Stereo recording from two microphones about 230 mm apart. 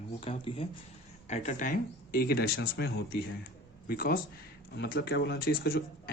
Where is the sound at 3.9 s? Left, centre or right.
Left.